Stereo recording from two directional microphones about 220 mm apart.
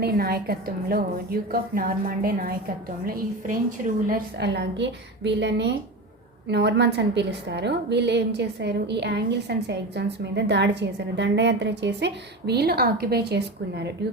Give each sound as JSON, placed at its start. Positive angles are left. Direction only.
{"t": 0.0, "sound": "a woman's voice", "side_deg": -45}
{"t": 4.4, "sound": "a woman's voice", "side_deg": -50}